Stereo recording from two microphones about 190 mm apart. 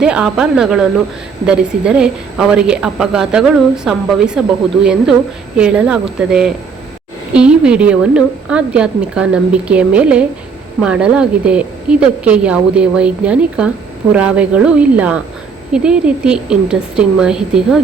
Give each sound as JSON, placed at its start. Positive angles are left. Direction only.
{"t": 0.0, "sound": "a woman's voice", "side_deg": -5}